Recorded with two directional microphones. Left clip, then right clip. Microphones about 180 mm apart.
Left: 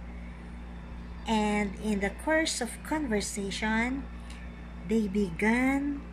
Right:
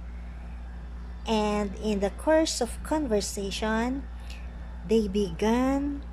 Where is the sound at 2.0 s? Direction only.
10° right (ahead or behind).